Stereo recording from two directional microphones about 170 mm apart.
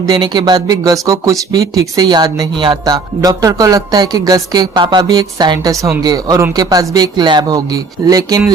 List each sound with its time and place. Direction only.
0.0 s speech: 25° right (ahead or behind)